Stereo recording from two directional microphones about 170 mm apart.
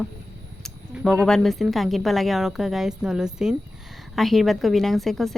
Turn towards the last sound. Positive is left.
turn(degrees=0)  # may be behind; listen again after turning